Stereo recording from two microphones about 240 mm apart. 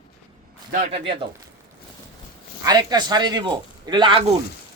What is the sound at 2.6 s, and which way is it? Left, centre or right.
Speech, centre.